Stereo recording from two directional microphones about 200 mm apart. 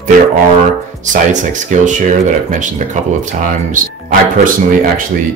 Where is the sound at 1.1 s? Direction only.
40° right (ahead or behind).